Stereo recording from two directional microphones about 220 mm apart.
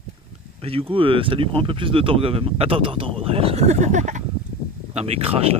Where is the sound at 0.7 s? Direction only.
25° right (ahead or behind).